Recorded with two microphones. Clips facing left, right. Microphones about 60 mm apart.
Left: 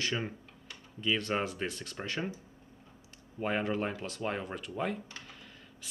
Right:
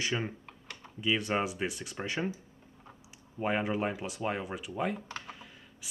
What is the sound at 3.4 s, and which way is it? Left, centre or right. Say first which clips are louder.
Speech: right 1 dB; centre.